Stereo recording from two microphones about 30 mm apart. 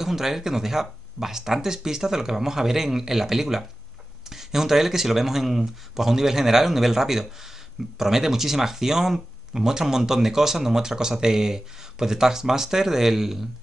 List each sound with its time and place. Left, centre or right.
0.0 s speech: centre